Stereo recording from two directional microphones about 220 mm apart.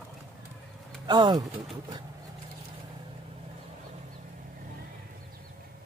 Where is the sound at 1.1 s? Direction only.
20° right (ahead or behind).